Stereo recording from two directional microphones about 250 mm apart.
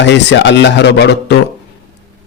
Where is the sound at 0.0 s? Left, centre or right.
Left.